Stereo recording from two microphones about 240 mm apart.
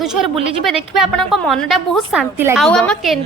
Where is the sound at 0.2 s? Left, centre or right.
Centre.